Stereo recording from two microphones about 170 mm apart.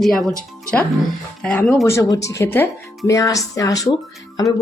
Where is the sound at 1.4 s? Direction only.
5° left (ahead or behind).